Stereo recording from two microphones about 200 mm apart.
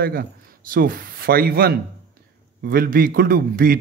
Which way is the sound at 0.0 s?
50° right (ahead or behind).